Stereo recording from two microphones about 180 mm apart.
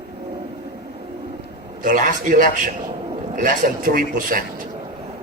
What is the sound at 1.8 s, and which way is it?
Speech, 45° right (ahead or behind).